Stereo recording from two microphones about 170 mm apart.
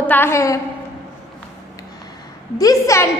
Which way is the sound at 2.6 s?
20° left (ahead or behind).